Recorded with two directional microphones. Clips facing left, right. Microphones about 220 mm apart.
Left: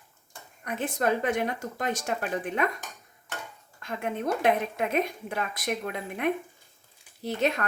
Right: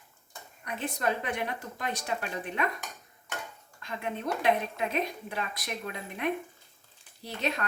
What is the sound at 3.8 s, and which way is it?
A woman's voice, 50° left (ahead or behind).